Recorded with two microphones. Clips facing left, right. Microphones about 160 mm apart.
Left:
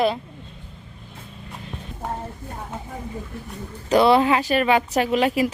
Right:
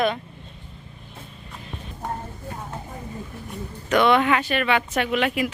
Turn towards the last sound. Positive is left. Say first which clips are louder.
# left 3 dB
turn(degrees=35)  # may be behind; listen again after turning